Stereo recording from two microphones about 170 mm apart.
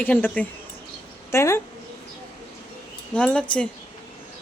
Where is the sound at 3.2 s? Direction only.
5° left (ahead or behind).